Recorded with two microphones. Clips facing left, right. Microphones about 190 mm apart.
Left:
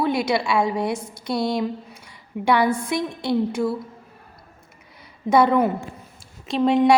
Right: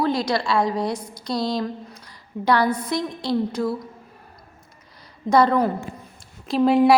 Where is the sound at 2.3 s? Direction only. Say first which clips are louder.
Left 1 dB; 15° left (ahead or behind).